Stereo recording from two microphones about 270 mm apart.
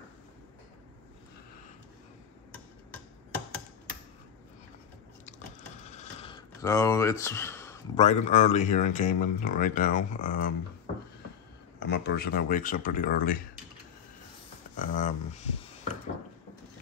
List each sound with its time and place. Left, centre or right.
5.9 s a sound: left
8.0 s speech: left
11.8 s speech: left
14.8 s speech: left